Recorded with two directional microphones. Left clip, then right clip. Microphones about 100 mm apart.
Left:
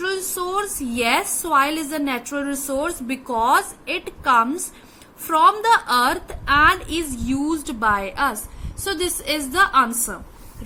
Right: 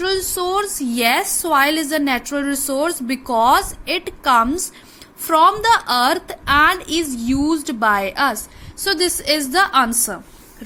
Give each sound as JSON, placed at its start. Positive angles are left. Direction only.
{"t": 0.0, "sound": "a woman's voice", "side_deg": -35}
{"t": 2.7, "sound": "a woman's voice", "side_deg": -50}